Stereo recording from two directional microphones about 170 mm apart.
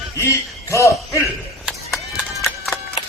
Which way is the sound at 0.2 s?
15° left (ahead or behind).